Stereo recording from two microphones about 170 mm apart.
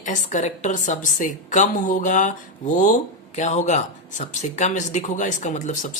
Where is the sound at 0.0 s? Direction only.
45° left (ahead or behind).